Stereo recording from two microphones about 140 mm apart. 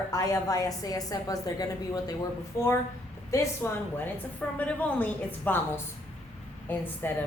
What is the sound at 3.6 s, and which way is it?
A woman's voice, 15° left (ahead or behind).